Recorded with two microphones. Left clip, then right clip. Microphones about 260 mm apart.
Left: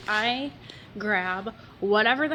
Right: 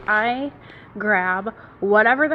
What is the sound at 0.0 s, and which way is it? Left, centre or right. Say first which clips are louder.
A woman's voice: right 6 dB; centre.